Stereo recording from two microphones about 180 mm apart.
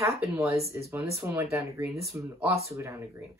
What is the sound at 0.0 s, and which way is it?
Speech, 15° right (ahead or behind).